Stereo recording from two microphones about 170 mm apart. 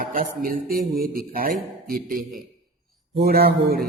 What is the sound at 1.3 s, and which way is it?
Speech, 60° right (ahead or behind).